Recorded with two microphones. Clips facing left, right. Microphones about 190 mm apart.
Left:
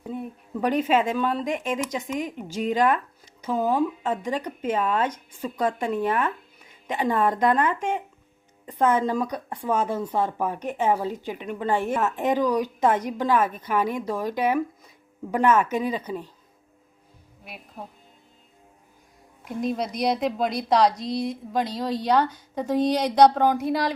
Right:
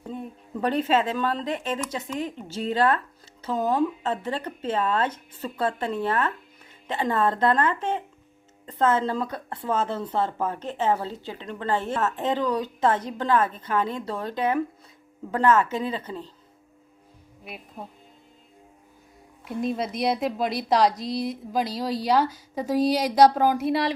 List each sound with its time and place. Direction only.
0.0 s speech: 5° left (ahead or behind)
17.4 s speech: centre (ahead or behind)
19.5 s a woman's voice: centre (ahead or behind)